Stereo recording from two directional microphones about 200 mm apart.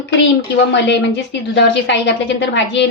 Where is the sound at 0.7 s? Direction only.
60° left (ahead or behind).